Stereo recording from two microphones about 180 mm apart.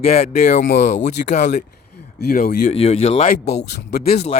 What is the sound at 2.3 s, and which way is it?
Speech, 55° left (ahead or behind).